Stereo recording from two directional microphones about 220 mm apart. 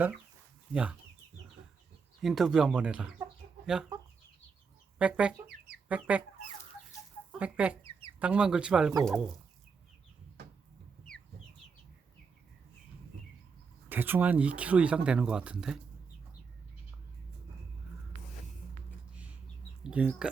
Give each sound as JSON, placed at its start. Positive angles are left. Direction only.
{"t": 0.7, "sound": "speech", "side_deg": -5}
{"t": 2.2, "sound": "speech", "side_deg": 0}
{"t": 4.9, "sound": "speech", "side_deg": -5}
{"t": 5.5, "sound": "chicken", "side_deg": -45}
{"t": 5.9, "sound": "speech", "side_deg": -5}
{"t": 7.3, "sound": "speech", "side_deg": -5}
{"t": 13.9, "sound": "speech", "side_deg": -10}
{"t": 19.1, "sound": "bird", "side_deg": -5}
{"t": 19.8, "sound": "speech", "side_deg": -5}